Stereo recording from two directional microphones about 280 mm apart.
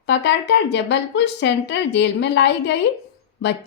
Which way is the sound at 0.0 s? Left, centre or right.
Left.